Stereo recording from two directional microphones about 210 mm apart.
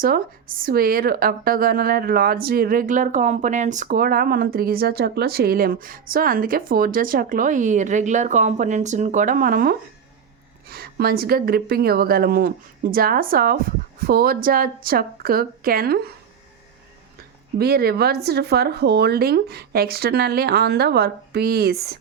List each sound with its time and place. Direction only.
0.0 s speech: 45° right (ahead or behind)
17.6 s speech: 50° right (ahead or behind)